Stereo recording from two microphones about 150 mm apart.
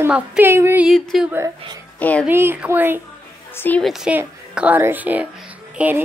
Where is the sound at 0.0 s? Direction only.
10° right (ahead or behind).